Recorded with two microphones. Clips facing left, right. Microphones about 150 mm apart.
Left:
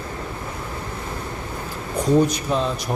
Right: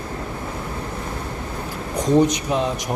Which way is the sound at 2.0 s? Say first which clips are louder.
Right 1 dB; 20° right (ahead or behind).